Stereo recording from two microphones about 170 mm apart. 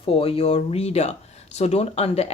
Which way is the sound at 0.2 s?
35° left (ahead or behind).